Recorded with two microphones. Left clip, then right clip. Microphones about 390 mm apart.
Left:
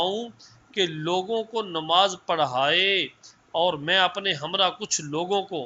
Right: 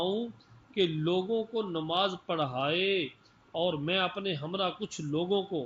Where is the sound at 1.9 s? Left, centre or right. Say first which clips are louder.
Left 9 dB; centre.